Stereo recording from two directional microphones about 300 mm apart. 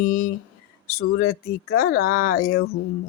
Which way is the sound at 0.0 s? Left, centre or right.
Left.